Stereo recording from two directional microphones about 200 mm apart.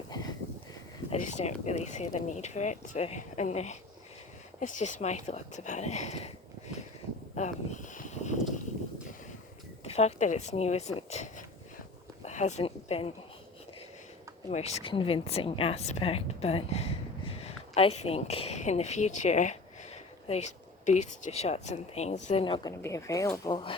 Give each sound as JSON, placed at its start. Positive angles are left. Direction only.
{"t": 1.1, "sound": "speech", "side_deg": 35}
{"t": 7.3, "sound": "a sound", "side_deg": 40}
{"t": 9.8, "sound": "speech", "side_deg": 30}
{"t": 14.5, "sound": "a woman's voice", "side_deg": 30}